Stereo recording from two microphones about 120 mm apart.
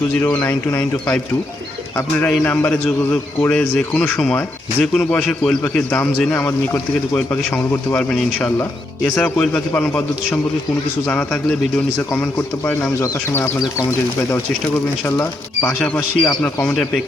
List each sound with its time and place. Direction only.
0.3 s speech: 15° left (ahead or behind)
9.1 s speech: 10° left (ahead or behind)